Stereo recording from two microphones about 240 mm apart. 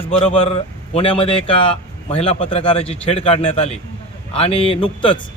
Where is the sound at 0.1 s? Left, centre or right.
Left.